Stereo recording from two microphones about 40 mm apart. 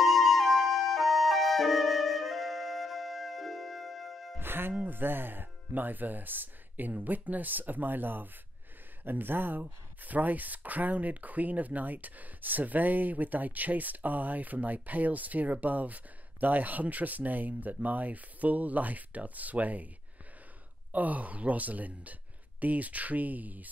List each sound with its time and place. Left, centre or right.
0.0 s flute: centre
4.4 s music: right
4.8 s speech: right
9.6 s speech: right
20.9 s speech: right